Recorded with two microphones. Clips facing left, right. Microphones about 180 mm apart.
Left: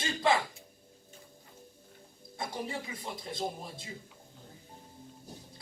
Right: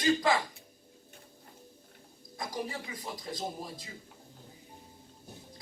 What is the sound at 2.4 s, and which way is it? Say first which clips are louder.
A woman's voice: even; 25° left (ahead or behind).